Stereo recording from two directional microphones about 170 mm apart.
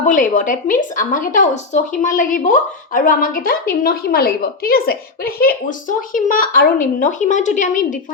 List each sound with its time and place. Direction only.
0.0 s speech: 50° left (ahead or behind)